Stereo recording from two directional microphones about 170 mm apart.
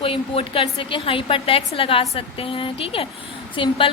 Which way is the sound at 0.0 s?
30° left (ahead or behind).